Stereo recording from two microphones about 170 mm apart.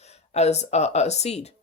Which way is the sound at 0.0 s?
40° left (ahead or behind).